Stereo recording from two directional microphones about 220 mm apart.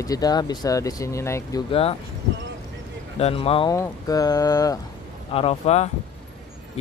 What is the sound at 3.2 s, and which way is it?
Speech, 25° left (ahead or behind).